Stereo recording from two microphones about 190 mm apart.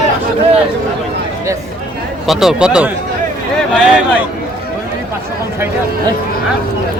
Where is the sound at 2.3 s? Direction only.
Centre (ahead or behind).